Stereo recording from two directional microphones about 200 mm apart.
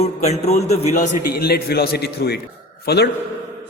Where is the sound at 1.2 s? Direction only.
50° left (ahead or behind).